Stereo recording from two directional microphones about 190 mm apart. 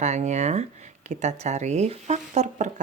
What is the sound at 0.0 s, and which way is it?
Speech, 35° right (ahead or behind).